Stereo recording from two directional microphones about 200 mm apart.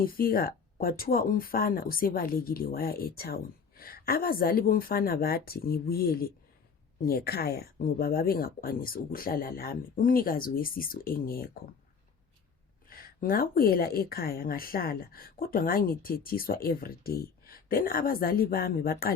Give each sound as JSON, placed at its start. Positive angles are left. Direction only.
{"t": 0.0, "sound": "speech", "side_deg": 45}
{"t": 12.9, "sound": "speech", "side_deg": 45}